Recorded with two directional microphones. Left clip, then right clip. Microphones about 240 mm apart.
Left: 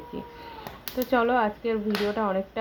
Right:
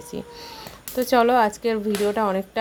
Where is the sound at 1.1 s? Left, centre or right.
Right.